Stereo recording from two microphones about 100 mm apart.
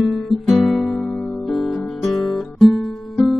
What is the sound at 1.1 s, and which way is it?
Music, 15° left (ahead or behind).